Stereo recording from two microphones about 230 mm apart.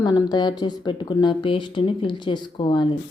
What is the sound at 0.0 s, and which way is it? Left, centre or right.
Speech, centre.